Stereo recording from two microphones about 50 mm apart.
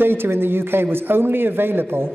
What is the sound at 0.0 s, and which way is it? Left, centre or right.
A man's voice, right.